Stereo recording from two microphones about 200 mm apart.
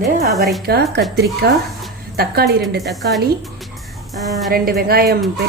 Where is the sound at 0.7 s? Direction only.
55° right (ahead or behind).